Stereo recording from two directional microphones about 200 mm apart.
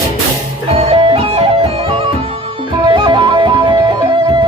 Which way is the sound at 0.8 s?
30° right (ahead or behind).